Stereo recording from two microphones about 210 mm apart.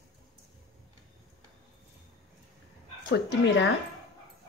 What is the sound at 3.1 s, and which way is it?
Speech, 55° left (ahead or behind).